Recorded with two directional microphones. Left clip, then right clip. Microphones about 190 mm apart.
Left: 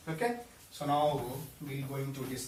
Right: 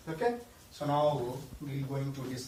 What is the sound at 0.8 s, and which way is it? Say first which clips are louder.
Speech: left 1 dB; 35° left (ahead or behind).